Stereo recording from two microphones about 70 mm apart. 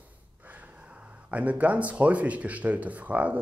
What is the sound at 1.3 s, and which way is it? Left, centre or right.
Speech, right.